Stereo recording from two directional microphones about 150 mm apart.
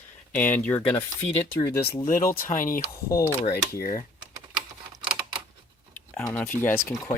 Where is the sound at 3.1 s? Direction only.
20° left (ahead or behind).